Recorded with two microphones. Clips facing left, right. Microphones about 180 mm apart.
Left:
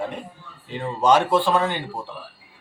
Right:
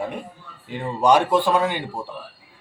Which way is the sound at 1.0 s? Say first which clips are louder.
Right 1 dB; 15° right (ahead or behind).